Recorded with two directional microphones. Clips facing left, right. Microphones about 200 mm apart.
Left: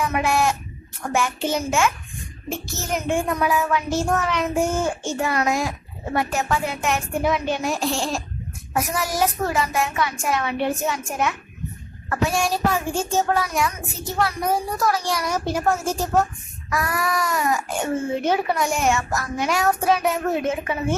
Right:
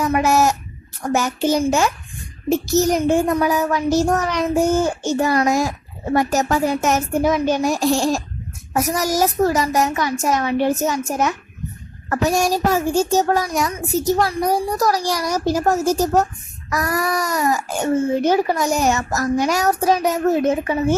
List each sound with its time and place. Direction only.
0.0 s a child's voice: 40° right (ahead or behind)